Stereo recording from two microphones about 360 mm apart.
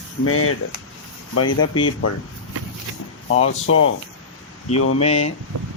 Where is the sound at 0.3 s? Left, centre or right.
Left.